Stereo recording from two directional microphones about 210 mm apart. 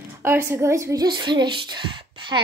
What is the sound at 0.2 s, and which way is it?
A woman's voice, 10° right (ahead or behind).